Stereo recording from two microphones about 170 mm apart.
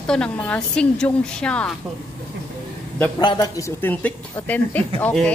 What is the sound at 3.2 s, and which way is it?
Speech, 25° left (ahead or behind).